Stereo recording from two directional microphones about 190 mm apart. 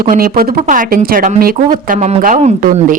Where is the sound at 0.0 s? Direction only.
50° right (ahead or behind).